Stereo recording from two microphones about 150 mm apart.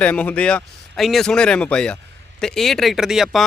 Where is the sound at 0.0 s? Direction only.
10° left (ahead or behind).